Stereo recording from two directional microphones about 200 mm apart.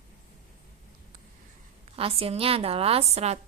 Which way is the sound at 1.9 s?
30° right (ahead or behind).